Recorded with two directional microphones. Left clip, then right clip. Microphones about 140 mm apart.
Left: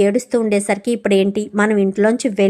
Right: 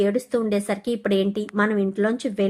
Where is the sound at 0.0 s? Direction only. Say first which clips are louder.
Left 6 dB; 35° left (ahead or behind).